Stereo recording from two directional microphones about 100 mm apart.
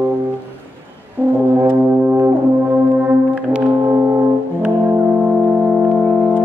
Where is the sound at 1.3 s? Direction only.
20° right (ahead or behind).